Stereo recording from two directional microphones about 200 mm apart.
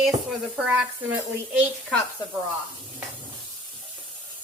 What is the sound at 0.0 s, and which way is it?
Speech, centre (ahead or behind).